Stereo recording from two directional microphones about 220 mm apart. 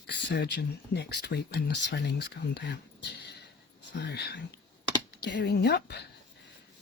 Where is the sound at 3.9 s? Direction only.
50° left (ahead or behind).